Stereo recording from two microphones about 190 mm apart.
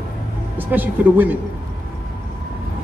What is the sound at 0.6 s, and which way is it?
Speech, 10° right (ahead or behind).